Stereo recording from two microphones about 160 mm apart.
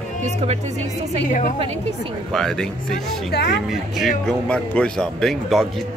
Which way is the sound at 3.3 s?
90° left.